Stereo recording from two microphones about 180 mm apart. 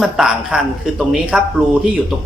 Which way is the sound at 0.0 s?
5° right (ahead or behind).